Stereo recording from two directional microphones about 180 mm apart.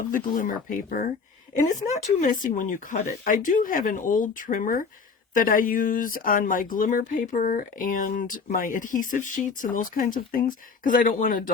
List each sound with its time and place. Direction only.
0.1 s speech: 50° left (ahead or behind)
2.1 s speech: 45° left (ahead or behind)